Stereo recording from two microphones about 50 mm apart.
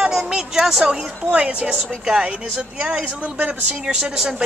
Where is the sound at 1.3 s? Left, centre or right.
Right.